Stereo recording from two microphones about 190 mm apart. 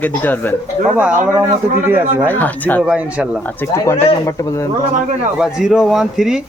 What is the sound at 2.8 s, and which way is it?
Speech, 5° right (ahead or behind).